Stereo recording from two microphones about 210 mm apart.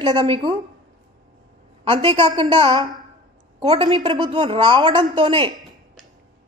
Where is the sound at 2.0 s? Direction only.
25° right (ahead or behind).